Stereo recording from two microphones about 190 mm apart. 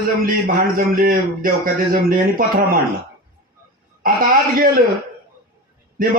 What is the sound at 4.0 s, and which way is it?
Speech, 50° right (ahead or behind).